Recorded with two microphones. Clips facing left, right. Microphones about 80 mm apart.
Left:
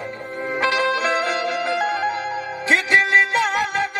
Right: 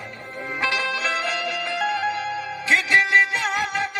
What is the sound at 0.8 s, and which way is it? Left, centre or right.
Music, left.